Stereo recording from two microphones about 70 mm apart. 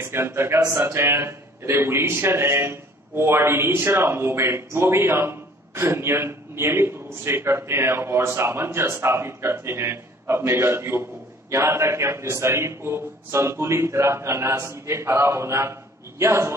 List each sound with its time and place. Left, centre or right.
0.0 s speech: right